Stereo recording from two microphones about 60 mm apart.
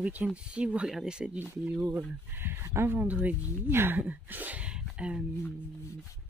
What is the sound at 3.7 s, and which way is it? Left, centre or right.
Speech, right.